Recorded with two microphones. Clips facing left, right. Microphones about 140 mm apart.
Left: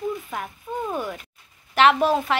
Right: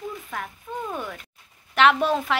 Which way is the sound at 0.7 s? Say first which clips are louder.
Left 4 dB; 5° left (ahead or behind).